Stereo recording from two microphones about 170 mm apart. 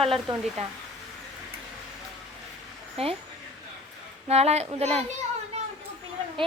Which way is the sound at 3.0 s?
35° right (ahead or behind).